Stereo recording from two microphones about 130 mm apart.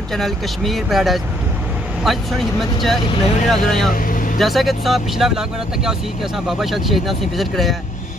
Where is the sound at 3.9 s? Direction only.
90° left.